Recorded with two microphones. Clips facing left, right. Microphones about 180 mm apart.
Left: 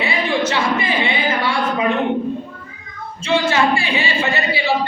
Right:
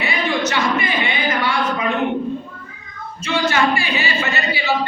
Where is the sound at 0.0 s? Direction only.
30° left (ahead or behind).